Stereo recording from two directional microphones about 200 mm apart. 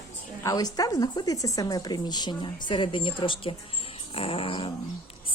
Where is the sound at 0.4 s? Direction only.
20° left (ahead or behind).